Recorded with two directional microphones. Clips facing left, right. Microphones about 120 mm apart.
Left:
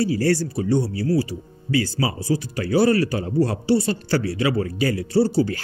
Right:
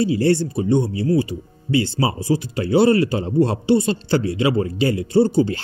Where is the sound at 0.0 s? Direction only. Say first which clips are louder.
Right 3 dB; 20° right (ahead or behind).